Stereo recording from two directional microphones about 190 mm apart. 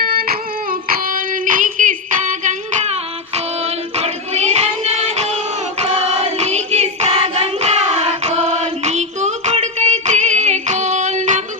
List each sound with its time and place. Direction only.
0.0 s child singing: 50° right (ahead or behind)
3.9 s music: 35° right (ahead or behind)
5.8 s choir: 35° right (ahead or behind)